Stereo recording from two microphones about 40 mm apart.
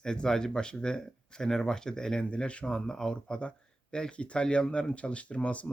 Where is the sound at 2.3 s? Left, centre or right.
Left.